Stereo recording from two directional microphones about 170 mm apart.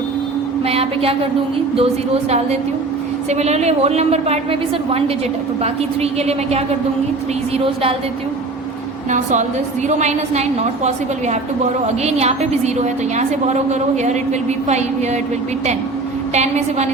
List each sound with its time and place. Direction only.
0.6 s a woman's voice: 35° right (ahead or behind)
3.2 s a woman's voice: 40° right (ahead or behind)
9.0 s a woman's voice: 45° right (ahead or behind)
16.3 s a woman's voice: 40° right (ahead or behind)